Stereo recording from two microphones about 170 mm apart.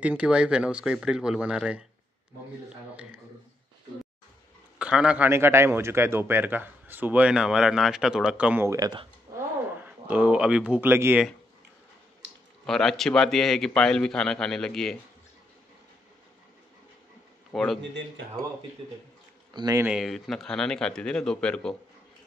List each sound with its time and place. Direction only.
0.0 s a man's voice: 5° right (ahead or behind)
4.7 s a man's voice: 5° right (ahead or behind)
8.7 s speech: 25° right (ahead or behind)
9.6 s speech: 10° right (ahead or behind)
12.6 s a man's voice: centre (ahead or behind)
17.5 s a man's voice: 5° left (ahead or behind)
19.5 s speech: 25° right (ahead or behind)
19.8 s a man's voice: 5° right (ahead or behind)